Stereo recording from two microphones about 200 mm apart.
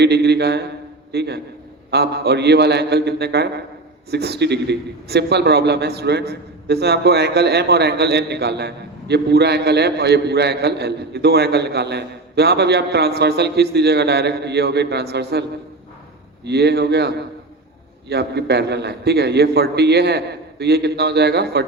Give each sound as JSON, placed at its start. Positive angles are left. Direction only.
{"t": 0.0, "sound": "a man's voice", "side_deg": -55}